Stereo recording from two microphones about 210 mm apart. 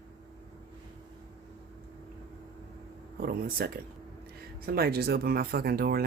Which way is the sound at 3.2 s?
45° right (ahead or behind).